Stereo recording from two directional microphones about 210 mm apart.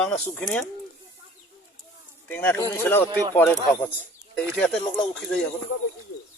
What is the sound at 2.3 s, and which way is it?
Speech, 10° left (ahead or behind).